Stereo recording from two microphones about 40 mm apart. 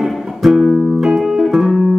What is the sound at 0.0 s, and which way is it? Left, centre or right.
Music, centre.